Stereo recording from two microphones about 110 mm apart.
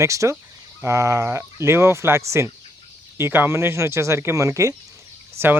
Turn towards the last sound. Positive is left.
turn(degrees=-25)  # may be behind; listen again after turning